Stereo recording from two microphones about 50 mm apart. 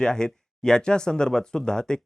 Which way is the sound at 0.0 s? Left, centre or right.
Centre.